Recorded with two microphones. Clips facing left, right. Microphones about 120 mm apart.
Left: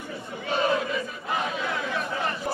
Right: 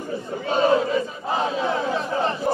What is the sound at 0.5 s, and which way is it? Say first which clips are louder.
Battle cry: right 6 dB; 30° right (ahead or behind).